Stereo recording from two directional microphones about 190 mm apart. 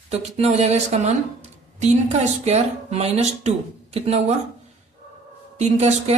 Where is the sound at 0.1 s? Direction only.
35° right (ahead or behind).